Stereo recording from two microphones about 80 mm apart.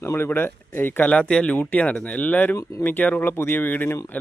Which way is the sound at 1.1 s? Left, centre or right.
Centre.